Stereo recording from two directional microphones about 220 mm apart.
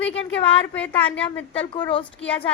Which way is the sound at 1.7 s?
25° left (ahead or behind).